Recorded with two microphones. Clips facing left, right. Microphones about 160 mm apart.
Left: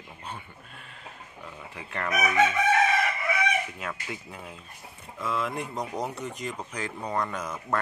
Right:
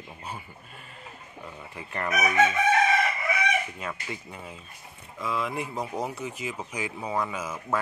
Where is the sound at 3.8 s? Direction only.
Centre (ahead or behind).